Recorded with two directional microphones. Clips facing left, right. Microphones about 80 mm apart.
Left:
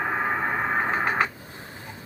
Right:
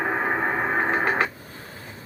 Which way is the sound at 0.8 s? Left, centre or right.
Centre.